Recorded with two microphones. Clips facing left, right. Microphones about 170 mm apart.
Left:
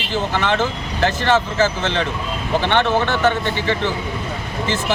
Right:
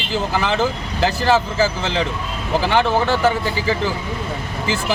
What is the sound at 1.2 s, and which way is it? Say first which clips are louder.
Speech: even; 5° right (ahead or behind).